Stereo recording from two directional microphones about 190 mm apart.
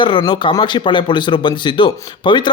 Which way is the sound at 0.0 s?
25° left (ahead or behind).